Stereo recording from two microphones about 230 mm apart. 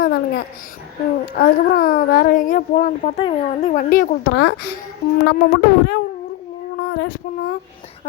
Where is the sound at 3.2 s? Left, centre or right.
Left.